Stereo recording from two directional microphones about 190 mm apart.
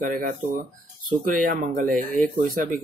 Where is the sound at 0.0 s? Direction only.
45° right (ahead or behind).